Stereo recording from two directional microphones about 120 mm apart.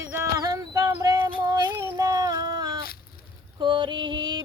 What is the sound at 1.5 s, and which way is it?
Child singing, 30° right (ahead or behind).